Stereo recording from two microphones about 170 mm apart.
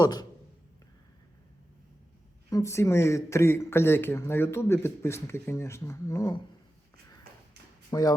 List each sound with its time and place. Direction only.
0.0 s speech: 25° left (ahead or behind)
2.5 s speech: 15° left (ahead or behind)
7.9 s speech: 25° left (ahead or behind)